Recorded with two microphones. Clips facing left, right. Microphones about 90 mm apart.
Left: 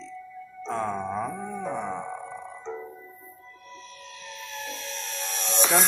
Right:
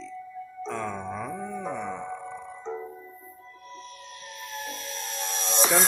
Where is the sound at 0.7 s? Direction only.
35° left (ahead or behind).